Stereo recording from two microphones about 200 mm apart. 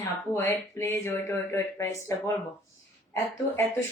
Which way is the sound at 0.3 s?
10° left (ahead or behind).